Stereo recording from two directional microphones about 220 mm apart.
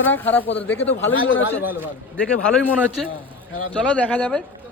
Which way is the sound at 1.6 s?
10° right (ahead or behind).